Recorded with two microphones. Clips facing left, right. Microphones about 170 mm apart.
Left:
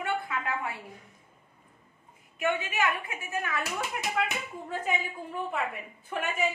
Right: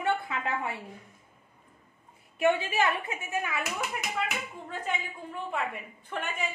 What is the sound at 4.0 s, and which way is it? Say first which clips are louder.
Speech: left 3 dB; centre (ahead or behind).